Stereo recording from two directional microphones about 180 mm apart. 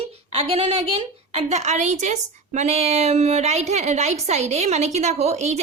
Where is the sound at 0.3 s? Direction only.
35° right (ahead or behind).